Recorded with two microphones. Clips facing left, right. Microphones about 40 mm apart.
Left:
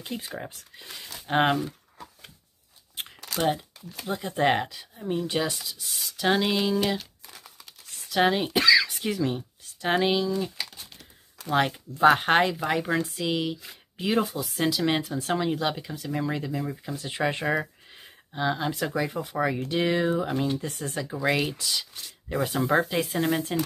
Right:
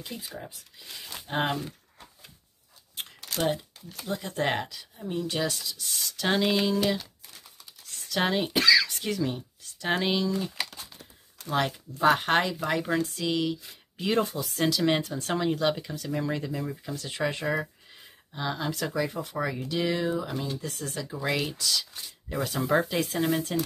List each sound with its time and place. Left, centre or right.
0.5 s speech: left
3.3 s speech: centre
8.1 s speech: centre
11.5 s speech: centre
16.9 s speech: centre
21.0 s speech: centre
22.6 s speech: centre